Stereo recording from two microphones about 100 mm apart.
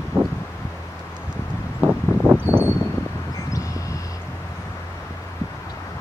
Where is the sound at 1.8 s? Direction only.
20° right (ahead or behind).